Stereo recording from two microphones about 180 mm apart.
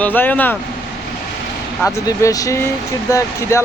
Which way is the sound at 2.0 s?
20° left (ahead or behind).